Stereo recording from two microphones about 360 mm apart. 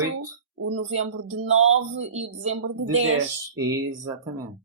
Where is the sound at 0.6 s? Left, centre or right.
Right.